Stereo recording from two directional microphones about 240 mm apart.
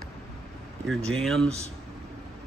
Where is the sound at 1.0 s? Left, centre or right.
Centre.